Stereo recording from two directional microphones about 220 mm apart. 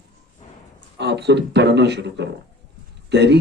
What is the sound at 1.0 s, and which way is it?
A man's voice, 50° right (ahead or behind).